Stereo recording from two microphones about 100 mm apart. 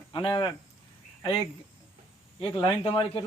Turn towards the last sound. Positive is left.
turn(degrees=60)  # may be behind; listen again after turning